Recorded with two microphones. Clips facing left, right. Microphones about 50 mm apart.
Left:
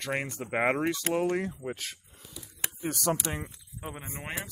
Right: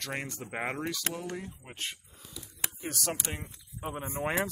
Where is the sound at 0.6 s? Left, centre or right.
Left.